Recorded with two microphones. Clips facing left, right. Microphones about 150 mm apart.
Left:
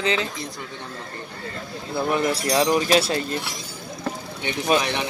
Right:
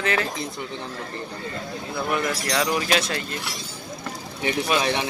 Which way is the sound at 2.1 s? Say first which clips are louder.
Left 4 dB; 30° left (ahead or behind).